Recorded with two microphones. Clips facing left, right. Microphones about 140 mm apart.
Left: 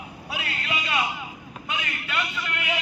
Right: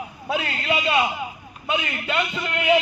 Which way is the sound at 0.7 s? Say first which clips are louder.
Right 7 dB; 25° right (ahead or behind).